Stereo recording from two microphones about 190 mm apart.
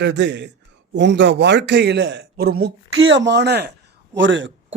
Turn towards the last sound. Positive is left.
turn(degrees=-80)